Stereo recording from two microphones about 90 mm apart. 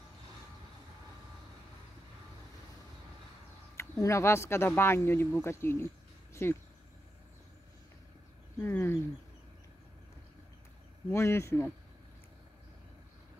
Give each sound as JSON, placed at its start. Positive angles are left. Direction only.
{"t": 4.0, "sound": "speech", "side_deg": 30}
{"t": 8.5, "sound": "a sound", "side_deg": 30}
{"t": 11.1, "sound": "speech", "side_deg": 30}